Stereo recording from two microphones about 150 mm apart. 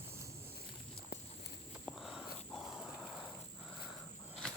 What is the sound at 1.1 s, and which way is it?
Walk, 90° left.